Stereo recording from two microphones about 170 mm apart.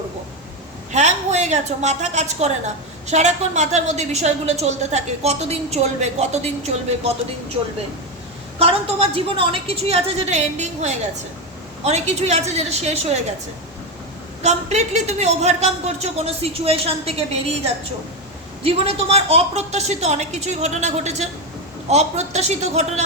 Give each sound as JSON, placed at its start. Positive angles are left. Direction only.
{"t": 0.9, "sound": "a woman's voice", "side_deg": -40}
{"t": 8.5, "sound": "a woman's voice", "side_deg": -35}
{"t": 14.4, "sound": "a woman's voice", "side_deg": -40}
{"t": 18.6, "sound": "a woman's voice", "side_deg": -35}